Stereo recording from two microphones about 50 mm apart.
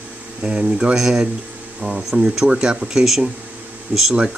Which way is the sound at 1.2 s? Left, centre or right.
Right.